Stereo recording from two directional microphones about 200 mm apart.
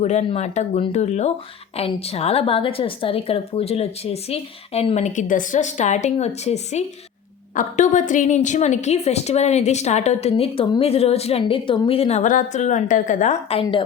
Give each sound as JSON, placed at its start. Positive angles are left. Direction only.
{"t": 0.0, "sound": "a woman's voice", "side_deg": 35}